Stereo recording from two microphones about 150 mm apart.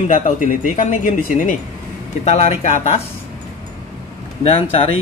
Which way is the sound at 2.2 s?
50° left (ahead or behind).